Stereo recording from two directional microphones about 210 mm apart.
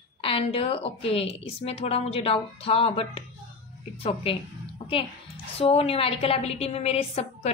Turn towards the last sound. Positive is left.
turn(degrees=30)  # may be behind; listen again after turning